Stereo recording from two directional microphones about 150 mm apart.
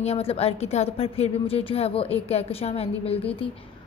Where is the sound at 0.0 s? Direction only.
45° left (ahead or behind).